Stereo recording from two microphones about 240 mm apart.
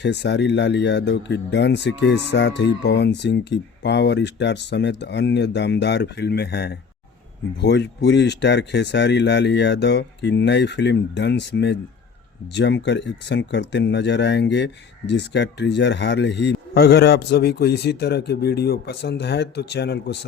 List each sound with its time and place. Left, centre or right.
0.0 s speech: left